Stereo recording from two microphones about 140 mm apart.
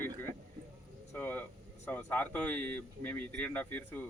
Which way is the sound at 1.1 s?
10° left (ahead or behind).